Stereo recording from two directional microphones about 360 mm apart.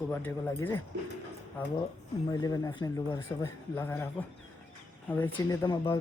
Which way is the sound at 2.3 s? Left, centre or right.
Centre.